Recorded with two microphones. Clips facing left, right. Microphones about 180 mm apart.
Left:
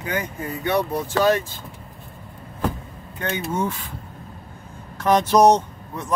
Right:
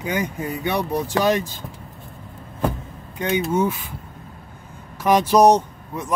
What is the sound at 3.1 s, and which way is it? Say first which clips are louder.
Speech: right 5 dB; 15° right (ahead or behind).